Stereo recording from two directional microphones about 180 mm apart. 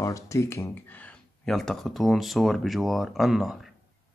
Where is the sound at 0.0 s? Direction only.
15° left (ahead or behind); by 3.5 s centre (ahead or behind).